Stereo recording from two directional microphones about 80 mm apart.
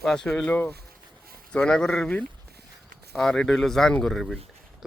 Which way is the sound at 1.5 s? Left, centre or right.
Centre.